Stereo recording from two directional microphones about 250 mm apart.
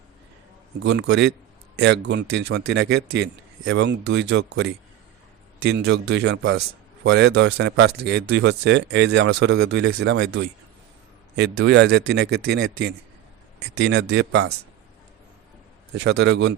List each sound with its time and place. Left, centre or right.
0.9 s speech: right
11.6 s speech: right
16.0 s speech: right